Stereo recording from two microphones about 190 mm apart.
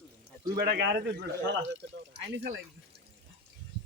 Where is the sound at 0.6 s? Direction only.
60° right (ahead or behind).